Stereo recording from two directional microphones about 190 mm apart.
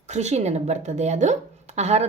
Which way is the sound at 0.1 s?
35° right (ahead or behind).